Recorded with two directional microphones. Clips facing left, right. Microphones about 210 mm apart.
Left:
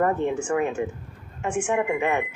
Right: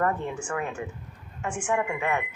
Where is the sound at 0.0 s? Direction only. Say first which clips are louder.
Left 5 dB; 25° left (ahead or behind).